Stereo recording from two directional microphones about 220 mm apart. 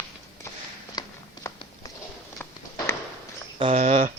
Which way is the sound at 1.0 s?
20° left (ahead or behind).